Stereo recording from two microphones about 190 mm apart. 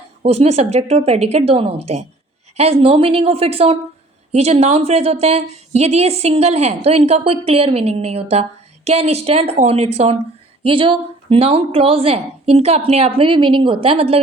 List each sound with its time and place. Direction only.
0.2 s a woman's voice: 35° right (ahead or behind)